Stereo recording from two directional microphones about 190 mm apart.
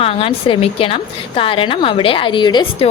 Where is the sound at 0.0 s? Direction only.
30° left (ahead or behind).